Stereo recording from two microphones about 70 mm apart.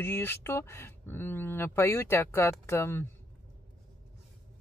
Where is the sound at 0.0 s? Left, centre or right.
Left.